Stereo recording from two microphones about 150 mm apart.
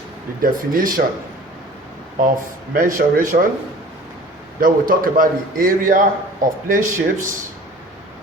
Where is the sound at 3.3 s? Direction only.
80° right.